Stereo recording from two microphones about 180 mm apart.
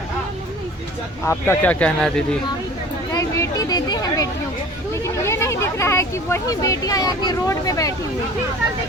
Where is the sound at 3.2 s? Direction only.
20° left (ahead or behind).